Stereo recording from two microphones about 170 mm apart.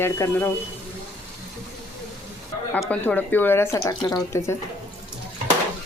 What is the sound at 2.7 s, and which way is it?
Speech, 5° left (ahead or behind).